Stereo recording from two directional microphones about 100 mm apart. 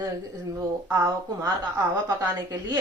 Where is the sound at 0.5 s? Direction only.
40° right (ahead or behind).